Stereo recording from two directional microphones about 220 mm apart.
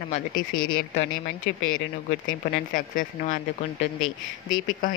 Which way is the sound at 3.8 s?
70° left (ahead or behind).